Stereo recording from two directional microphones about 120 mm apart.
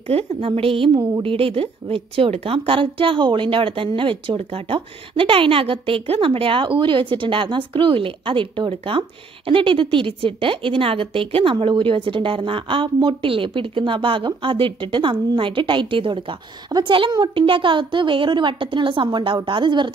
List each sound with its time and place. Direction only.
0.1 s a woman's voice: 50° right (ahead or behind)